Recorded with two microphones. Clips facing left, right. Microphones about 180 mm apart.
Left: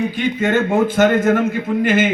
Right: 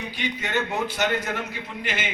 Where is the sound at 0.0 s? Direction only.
50° left (ahead or behind).